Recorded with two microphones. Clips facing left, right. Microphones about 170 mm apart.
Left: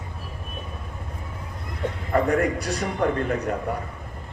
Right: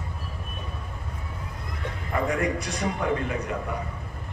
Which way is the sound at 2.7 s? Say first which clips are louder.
Left 3 dB; 50° left (ahead or behind).